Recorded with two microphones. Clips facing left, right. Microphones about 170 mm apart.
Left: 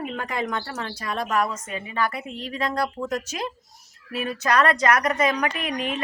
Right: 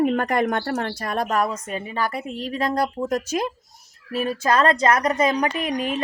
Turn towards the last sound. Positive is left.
turn(degrees=-40)  # may be behind; listen again after turning